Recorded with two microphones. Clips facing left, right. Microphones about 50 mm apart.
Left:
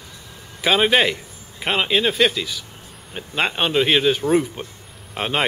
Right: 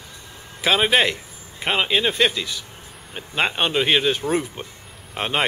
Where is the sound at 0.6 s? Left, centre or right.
Centre.